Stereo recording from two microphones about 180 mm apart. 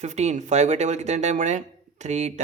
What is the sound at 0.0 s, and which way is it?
Speech, 40° right (ahead or behind).